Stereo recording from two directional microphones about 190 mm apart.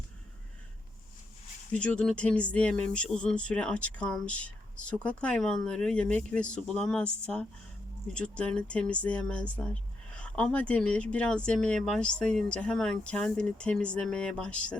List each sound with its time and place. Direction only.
1.8 s speech: 5° left (ahead or behind)